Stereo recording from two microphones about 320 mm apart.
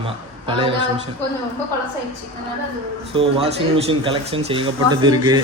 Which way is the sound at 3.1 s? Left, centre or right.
Centre.